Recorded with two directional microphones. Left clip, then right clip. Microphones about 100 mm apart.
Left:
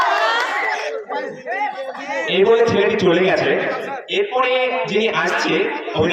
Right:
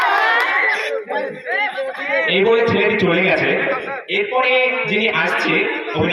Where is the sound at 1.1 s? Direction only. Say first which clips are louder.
Right 3 dB; 35° left (ahead or behind).